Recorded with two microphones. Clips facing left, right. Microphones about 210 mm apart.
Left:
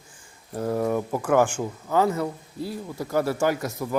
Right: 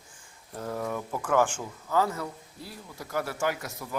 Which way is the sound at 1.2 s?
10° left (ahead or behind).